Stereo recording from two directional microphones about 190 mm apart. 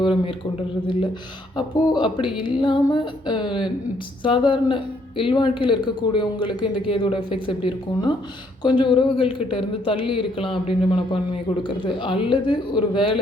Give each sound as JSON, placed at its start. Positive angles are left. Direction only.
{"t": 0.0, "sound": "speech", "side_deg": 25}
{"t": 1.5, "sound": "speech", "side_deg": 25}